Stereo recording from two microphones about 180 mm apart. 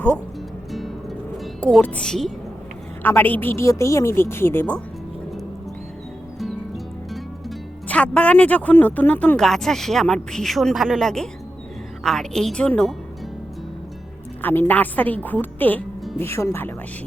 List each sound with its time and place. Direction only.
1.6 s a woman's voice: 5° left (ahead or behind)
6.4 s a woman's voice: centre (ahead or behind)
14.4 s a woman's voice: 10° left (ahead or behind)